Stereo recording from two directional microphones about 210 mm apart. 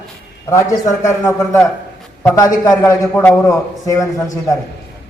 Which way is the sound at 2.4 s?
15° left (ahead or behind).